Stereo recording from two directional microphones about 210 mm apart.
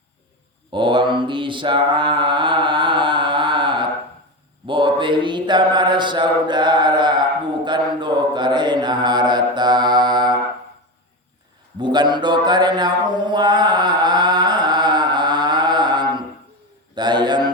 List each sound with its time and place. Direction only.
0.7 s mantra: 25° right (ahead or behind)
11.8 s mantra: 20° right (ahead or behind)
16.9 s a sound: 20° right (ahead or behind)